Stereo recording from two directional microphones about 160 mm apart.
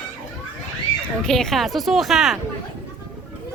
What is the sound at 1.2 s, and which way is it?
Speech, centre (ahead or behind).